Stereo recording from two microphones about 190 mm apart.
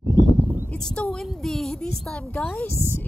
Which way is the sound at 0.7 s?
5° left (ahead or behind).